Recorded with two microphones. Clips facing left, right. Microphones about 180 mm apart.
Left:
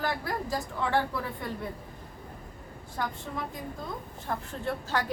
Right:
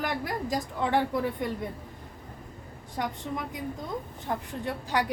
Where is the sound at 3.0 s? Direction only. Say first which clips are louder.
Right 2 dB; 20° right (ahead or behind).